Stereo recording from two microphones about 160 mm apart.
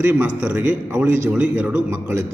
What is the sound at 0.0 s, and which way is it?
A man's voice, 10° right (ahead or behind).